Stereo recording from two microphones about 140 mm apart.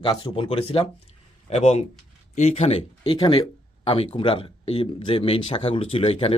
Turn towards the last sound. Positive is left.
turn(degrees=45)  # may be behind; listen again after turning